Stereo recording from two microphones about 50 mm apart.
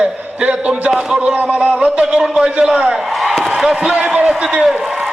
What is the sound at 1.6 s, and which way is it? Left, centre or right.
Speech, right.